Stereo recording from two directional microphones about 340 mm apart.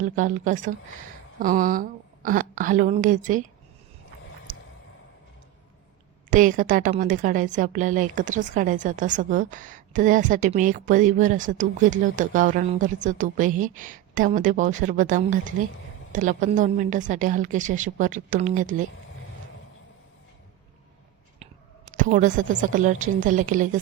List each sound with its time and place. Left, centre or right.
0.0 s a woman's voice: right
6.3 s a woman's voice: right
21.9 s a woman's voice: right